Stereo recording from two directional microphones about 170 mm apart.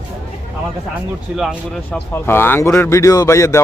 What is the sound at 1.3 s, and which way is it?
Speech, 10° right (ahead or behind).